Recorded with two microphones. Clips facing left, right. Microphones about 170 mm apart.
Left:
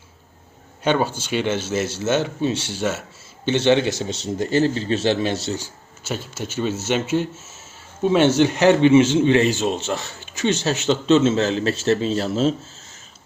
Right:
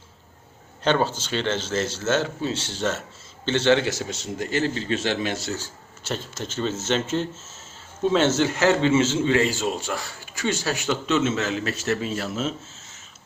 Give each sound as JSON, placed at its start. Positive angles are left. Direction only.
{"t": 0.9, "sound": "speech", "side_deg": 10}
{"t": 4.4, "sound": "speech", "side_deg": 30}
{"t": 5.5, "sound": "a man's voice", "side_deg": 15}